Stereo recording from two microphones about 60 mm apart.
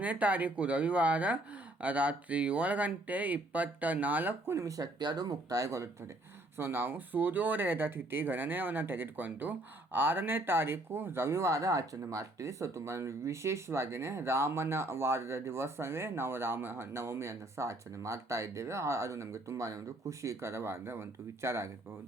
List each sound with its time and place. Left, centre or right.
0.0 s speech: right
4.5 s speech: right
6.6 s speech: right